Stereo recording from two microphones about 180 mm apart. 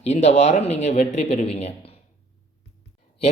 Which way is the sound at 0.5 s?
40° left (ahead or behind).